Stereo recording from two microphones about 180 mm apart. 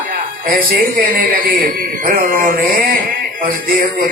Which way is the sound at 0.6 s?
50° right (ahead or behind).